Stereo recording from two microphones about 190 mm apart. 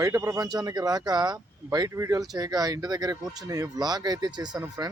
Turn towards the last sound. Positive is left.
turn(degrees=-15)  # may be behind; listen again after turning